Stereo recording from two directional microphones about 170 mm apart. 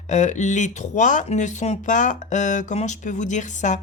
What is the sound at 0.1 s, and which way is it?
Speech, 45° left (ahead or behind).